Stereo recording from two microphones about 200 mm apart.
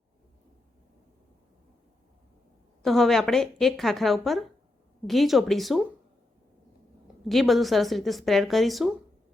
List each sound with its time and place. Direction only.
2.8 s a woman's voice: centre (ahead or behind)
7.3 s a woman's voice: centre (ahead or behind)